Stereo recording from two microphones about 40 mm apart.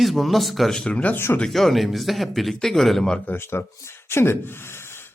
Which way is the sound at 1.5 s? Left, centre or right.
Centre.